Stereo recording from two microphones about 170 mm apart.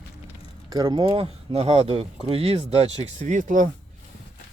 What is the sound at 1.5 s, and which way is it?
Speech, 35° right (ahead or behind).